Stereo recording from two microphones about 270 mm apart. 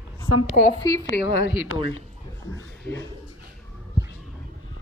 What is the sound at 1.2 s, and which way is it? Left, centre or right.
Speech, left.